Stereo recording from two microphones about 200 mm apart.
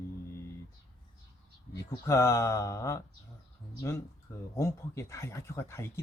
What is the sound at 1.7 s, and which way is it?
Speech, 15° left (ahead or behind).